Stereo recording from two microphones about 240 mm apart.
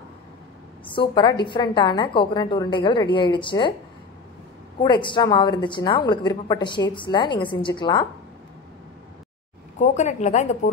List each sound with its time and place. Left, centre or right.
0.8 s a woman's voice: centre
4.8 s a woman's voice: centre
9.8 s a woman's voice: left